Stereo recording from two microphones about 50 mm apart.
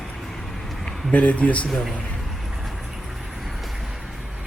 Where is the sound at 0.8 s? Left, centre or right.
Left.